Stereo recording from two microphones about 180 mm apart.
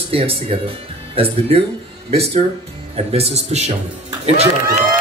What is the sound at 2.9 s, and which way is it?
Speech, 35° right (ahead or behind).